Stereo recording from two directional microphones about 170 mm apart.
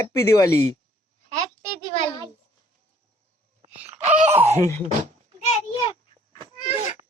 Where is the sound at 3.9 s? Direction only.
40° right (ahead or behind).